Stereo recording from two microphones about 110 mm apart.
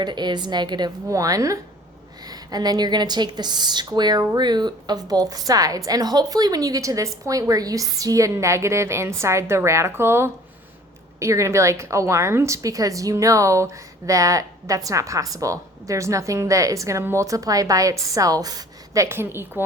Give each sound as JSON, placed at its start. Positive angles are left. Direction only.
{"t": 0.0, "sound": "a woman's voice", "side_deg": -40}
{"t": 19.0, "sound": "a woman's voice", "side_deg": -20}